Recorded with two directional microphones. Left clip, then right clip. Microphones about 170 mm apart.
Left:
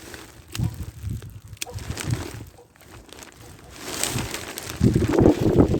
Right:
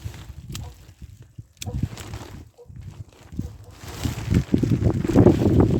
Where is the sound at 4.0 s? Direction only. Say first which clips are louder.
Even; 75° left (ahead or behind).